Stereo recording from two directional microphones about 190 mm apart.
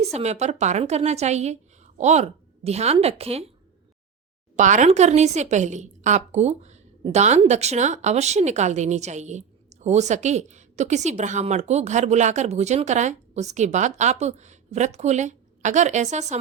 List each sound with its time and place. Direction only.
0.0 s a woman's voice: 35° right (ahead or behind)
4.5 s a woman's voice: 40° right (ahead or behind)